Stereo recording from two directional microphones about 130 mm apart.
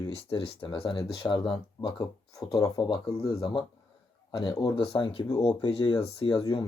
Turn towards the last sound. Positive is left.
turn(degrees=35)  # may be behind; listen again after turning